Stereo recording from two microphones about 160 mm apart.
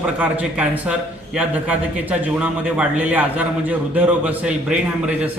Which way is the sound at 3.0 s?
10° right (ahead or behind).